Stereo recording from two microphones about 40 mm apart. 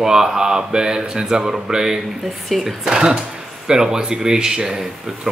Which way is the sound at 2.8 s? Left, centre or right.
Centre.